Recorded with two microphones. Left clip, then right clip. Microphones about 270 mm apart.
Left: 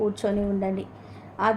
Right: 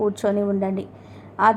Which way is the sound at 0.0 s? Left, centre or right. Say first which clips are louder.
Right 4 dB; centre.